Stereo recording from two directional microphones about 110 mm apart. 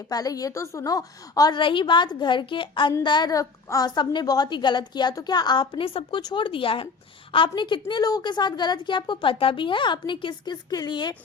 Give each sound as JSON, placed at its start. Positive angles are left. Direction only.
{"t": 0.1, "sound": "a woman's voice", "side_deg": 35}